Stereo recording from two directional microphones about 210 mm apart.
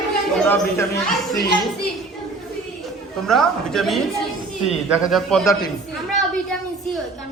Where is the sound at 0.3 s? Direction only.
10° left (ahead or behind).